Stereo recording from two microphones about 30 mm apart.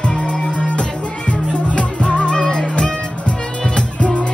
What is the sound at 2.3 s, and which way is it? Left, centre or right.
Music, left.